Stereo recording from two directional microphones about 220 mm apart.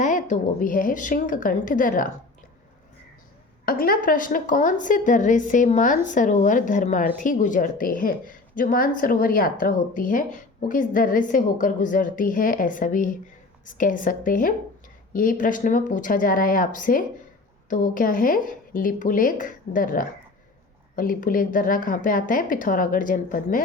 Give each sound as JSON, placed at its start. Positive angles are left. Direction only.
{"t": 0.0, "sound": "a woman's voice", "side_deg": 35}
{"t": 3.7, "sound": "a woman's voice", "side_deg": 40}